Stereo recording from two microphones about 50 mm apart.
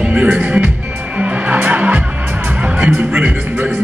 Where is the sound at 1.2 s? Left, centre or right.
Right.